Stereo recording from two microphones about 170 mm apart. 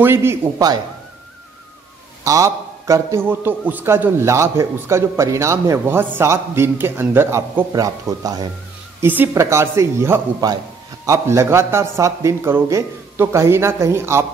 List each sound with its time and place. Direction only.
0.0 s a man's voice: 15° right (ahead or behind)
2.2 s a man's voice: 20° right (ahead or behind)